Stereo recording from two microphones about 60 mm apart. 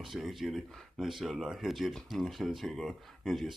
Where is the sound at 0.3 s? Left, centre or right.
Centre.